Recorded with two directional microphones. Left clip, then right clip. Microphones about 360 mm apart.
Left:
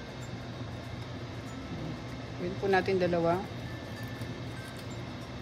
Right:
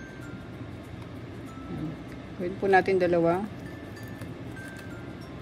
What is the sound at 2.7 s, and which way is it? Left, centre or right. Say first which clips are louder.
Speech: right 6 dB; centre.